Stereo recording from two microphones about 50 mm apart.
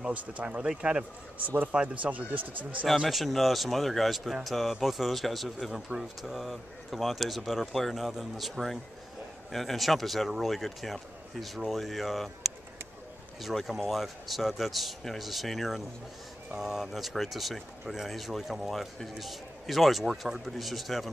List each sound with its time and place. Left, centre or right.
0.1 s speech: right
3.1 s speech: centre
13.7 s speech: centre